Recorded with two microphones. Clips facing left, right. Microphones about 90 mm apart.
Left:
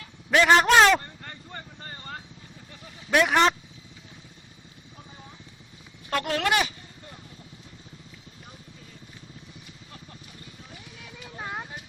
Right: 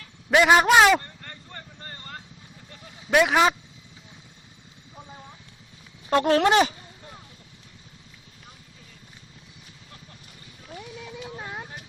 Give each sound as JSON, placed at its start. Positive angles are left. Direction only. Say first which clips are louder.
{"t": 0.3, "sound": "a man's voice", "louder": "right 1 dB", "side_deg": -10}
{"t": 0.9, "sound": "vehicle", "louder": "right 2 dB", "side_deg": 5}
{"t": 3.2, "sound": "a man's voice", "louder": "right 1 dB", "side_deg": -10}
{"t": 6.1, "sound": "speech", "louder": "right 6 dB", "side_deg": -25}